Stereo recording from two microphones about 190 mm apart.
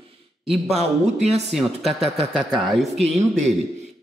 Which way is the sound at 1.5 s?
Centre (ahead or behind).